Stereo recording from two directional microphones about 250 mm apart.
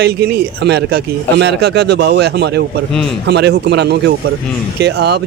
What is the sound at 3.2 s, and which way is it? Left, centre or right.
Speech, right.